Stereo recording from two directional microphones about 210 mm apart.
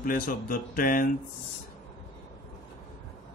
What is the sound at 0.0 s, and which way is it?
Speech, 40° left (ahead or behind).